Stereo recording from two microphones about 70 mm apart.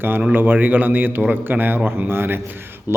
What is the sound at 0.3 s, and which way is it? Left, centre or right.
A man's voice, right.